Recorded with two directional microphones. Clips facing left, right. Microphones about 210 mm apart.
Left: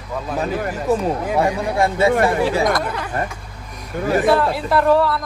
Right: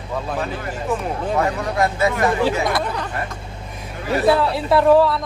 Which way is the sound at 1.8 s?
30° left (ahead or behind).